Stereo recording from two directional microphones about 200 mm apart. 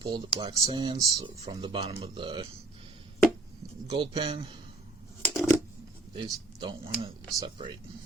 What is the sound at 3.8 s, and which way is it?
Speech, 30° right (ahead or behind).